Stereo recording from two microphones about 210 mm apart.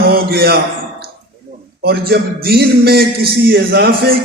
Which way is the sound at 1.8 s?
50° right (ahead or behind).